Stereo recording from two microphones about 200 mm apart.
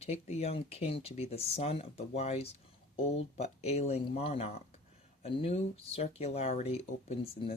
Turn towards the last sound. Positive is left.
turn(degrees=30)  # may be behind; listen again after turning